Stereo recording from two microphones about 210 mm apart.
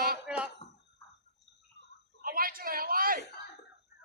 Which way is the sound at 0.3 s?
5° right (ahead or behind).